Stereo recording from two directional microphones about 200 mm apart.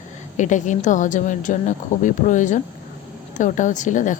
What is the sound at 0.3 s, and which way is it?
Speech, 40° left (ahead or behind).